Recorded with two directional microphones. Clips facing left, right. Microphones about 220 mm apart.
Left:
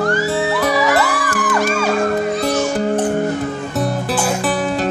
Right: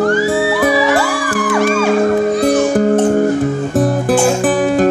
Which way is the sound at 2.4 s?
50° right (ahead or behind).